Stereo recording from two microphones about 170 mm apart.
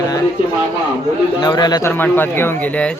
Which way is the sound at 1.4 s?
25° left (ahead or behind).